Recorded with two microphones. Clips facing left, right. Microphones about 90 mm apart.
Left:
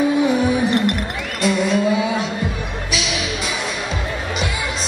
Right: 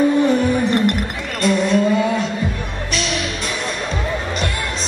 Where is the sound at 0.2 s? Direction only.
5° left (ahead or behind).